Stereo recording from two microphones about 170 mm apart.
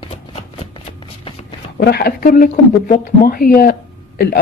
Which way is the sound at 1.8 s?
65° left (ahead or behind).